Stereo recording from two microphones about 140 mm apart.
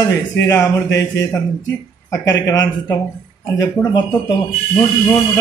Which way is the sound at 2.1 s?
25° left (ahead or behind).